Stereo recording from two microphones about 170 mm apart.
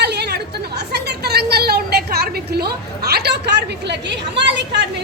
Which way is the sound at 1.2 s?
70° right (ahead or behind).